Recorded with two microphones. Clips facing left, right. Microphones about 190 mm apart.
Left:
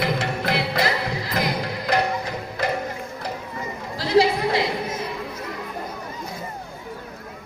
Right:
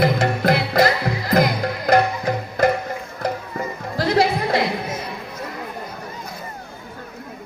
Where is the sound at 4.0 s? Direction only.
50° right (ahead or behind).